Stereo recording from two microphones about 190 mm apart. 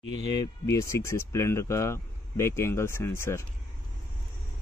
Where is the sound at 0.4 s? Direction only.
15° left (ahead or behind).